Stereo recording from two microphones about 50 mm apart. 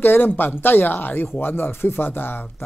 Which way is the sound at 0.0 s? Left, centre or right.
Left.